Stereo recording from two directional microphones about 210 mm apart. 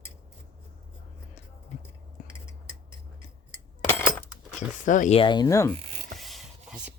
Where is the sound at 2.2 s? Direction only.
40° left (ahead or behind).